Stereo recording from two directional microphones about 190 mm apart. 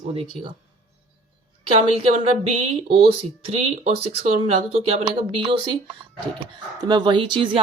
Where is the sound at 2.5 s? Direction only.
35° right (ahead or behind).